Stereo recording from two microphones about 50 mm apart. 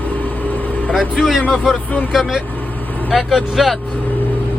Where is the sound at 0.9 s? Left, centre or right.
Centre.